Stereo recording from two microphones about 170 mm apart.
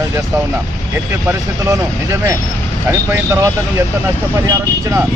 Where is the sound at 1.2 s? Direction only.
15° right (ahead or behind).